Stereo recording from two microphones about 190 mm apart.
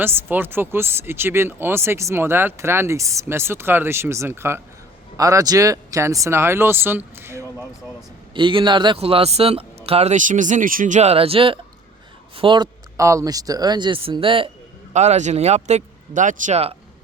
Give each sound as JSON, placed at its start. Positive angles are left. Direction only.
{"t": 0.0, "sound": "speech", "side_deg": -10}
{"t": 8.3, "sound": "speech", "side_deg": -25}